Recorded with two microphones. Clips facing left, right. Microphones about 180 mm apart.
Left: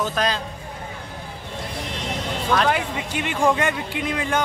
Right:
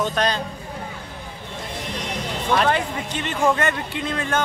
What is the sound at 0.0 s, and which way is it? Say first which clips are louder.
Speech: right 1 dB; centre (ahead or behind).